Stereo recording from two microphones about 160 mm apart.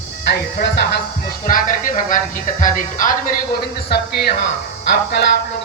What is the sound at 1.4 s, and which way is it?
Speech, 60° left (ahead or behind).